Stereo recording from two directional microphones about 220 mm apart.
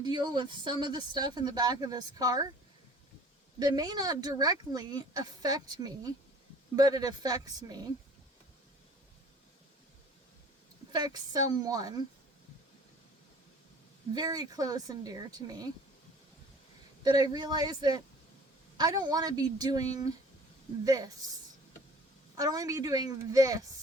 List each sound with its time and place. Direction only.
0.0 s speech: 20° right (ahead or behind)
3.6 s speech: 20° right (ahead or behind)
10.9 s speech: 20° right (ahead or behind)
14.1 s speech: 15° right (ahead or behind)
17.0 s speech: 20° right (ahead or behind)
22.4 s speech: 15° right (ahead or behind)